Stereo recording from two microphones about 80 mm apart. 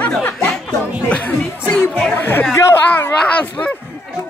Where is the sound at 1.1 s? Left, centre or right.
Centre.